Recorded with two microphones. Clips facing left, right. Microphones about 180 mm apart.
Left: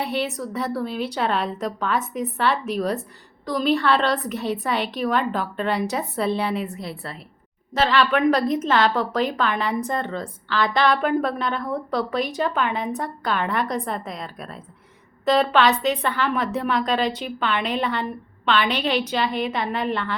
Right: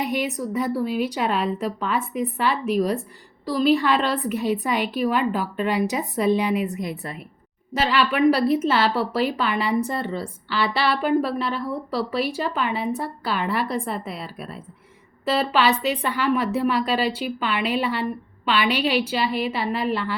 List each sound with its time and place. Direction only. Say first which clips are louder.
0.0 s a woman's voice: right 1 dB; 10° right (ahead or behind)